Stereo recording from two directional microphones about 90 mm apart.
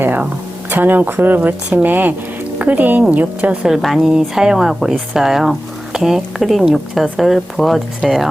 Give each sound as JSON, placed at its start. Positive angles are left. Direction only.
{"t": 0.0, "sound": "a sound", "side_deg": -20}
{"t": 0.7, "sound": "a woman's voice", "side_deg": -20}
{"t": 3.7, "sound": "speech", "side_deg": 0}